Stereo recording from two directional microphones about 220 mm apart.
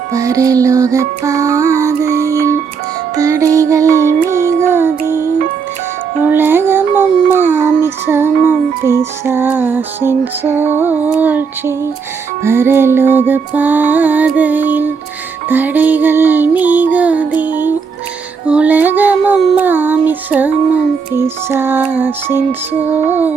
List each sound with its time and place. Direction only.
0.1 s music: 15° right (ahead or behind)
6.2 s music: 10° right (ahead or behind)
18.4 s child singing: 5° right (ahead or behind)
21.2 s music: 10° right (ahead or behind)